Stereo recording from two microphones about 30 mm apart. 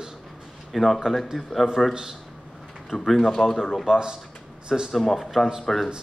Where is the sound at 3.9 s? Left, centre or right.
Right.